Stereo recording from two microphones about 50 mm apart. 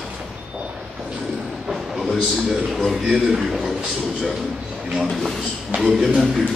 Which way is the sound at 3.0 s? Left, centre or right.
Centre.